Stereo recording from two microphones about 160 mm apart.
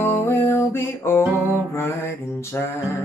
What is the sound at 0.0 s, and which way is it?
Music, 15° left (ahead or behind).